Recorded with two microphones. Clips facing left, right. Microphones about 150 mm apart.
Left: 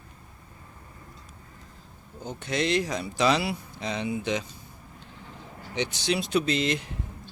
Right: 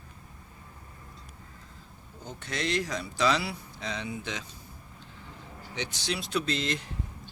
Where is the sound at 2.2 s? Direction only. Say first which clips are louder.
Left 6 dB; 20° left (ahead or behind).